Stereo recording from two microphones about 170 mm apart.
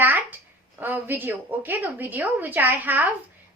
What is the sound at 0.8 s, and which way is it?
A woman's voice, 10° right (ahead or behind).